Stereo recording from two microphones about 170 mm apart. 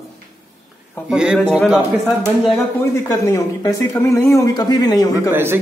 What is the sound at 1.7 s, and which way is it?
Speech, 10° right (ahead or behind).